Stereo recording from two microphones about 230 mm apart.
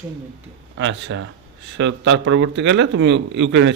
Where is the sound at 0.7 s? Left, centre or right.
Right.